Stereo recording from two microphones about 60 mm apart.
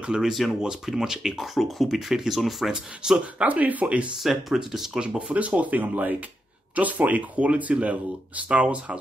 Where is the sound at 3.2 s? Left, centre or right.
Right.